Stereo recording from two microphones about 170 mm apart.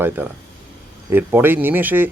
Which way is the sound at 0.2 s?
10° right (ahead or behind).